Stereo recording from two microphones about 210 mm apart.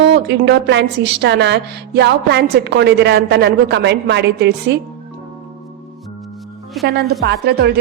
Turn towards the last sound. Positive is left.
turn(degrees=-50)  # may be behind; listen again after turning